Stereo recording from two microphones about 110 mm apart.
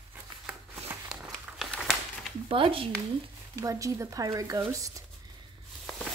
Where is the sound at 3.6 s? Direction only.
30° right (ahead or behind).